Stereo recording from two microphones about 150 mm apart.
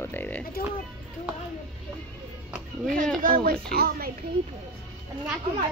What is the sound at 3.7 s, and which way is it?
Speech, 90° right.